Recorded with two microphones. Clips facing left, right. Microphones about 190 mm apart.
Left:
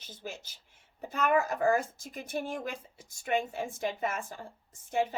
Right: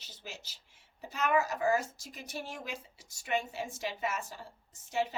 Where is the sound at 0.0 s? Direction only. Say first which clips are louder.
Left 6 dB; 50° left (ahead or behind).